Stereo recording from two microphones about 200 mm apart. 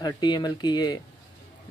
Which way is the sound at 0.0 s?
20° left (ahead or behind).